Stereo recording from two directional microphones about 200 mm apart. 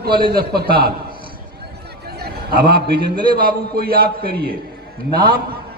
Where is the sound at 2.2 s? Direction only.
50° right (ahead or behind).